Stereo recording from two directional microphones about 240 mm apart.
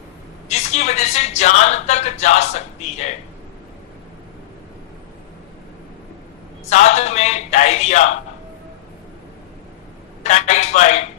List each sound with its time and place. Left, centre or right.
0.4 s a woman's voice: left
6.7 s a man's voice: left
10.2 s a man's voice: left